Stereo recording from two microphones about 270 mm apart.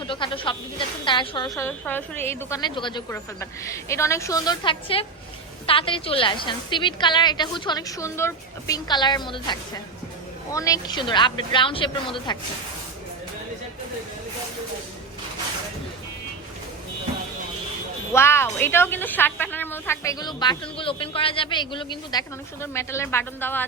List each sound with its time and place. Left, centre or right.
0.1 s a woman's voice: centre
1.5 s a woman's voice: centre
18.1 s a woman's voice: centre